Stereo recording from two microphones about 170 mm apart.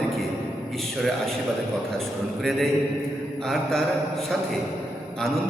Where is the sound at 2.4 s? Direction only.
5° left (ahead or behind).